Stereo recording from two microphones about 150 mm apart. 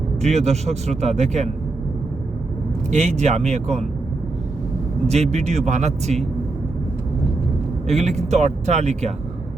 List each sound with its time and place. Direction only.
0.2 s speech: 45° right (ahead or behind)
2.9 s speech: 50° right (ahead or behind)
5.0 s speech: 45° right (ahead or behind)
7.9 s speech: 50° right (ahead or behind)